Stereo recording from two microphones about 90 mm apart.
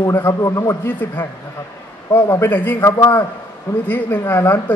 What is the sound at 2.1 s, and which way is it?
A man's voice, 30° left (ahead or behind).